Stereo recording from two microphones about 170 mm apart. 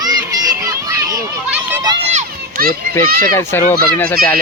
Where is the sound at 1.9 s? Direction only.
40° right (ahead or behind).